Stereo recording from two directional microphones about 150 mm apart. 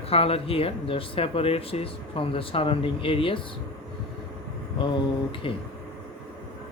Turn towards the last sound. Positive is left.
turn(degrees=35)  # may be behind; listen again after turning